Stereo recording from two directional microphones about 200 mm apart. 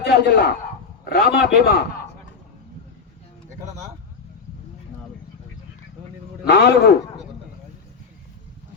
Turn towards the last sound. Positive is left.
turn(degrees=60)  # may be behind; listen again after turning